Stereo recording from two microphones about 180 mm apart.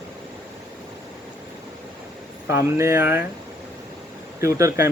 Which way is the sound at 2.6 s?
15° right (ahead or behind).